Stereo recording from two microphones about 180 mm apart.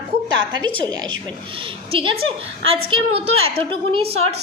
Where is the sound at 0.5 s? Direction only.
25° right (ahead or behind).